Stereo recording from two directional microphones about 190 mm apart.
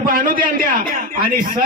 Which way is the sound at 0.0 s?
45° right (ahead or behind).